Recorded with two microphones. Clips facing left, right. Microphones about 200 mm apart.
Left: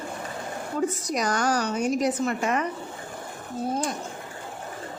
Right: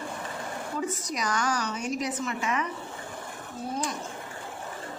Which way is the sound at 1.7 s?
45° left (ahead or behind).